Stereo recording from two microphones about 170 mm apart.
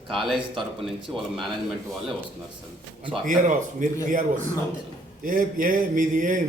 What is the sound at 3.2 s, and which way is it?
A man's voice, 50° right (ahead or behind).